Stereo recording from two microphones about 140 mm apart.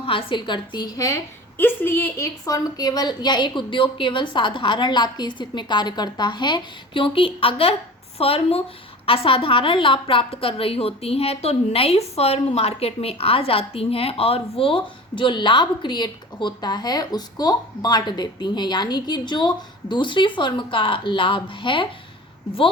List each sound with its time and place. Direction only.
0.0 s a woman's voice: 40° left (ahead or behind)